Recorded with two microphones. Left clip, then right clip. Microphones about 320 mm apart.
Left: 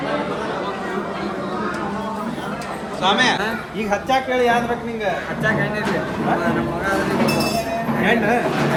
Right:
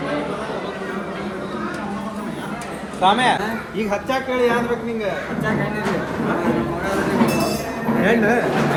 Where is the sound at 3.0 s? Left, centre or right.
Centre.